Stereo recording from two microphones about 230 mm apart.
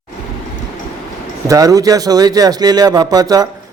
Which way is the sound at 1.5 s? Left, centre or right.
Centre.